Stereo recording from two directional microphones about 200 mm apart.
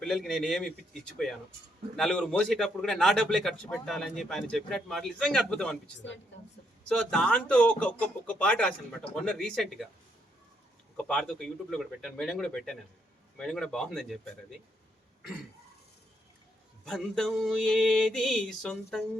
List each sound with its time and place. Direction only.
0.0 s a man's voice: centre (ahead or behind)
2.0 s a man's voice: 5° left (ahead or behind)
6.8 s a man's voice: 5° left (ahead or behind)
10.9 s a man's voice: 5° left (ahead or behind)
16.8 s a man's voice: centre (ahead or behind)